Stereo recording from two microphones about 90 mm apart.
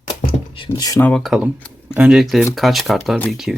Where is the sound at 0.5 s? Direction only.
70° left (ahead or behind).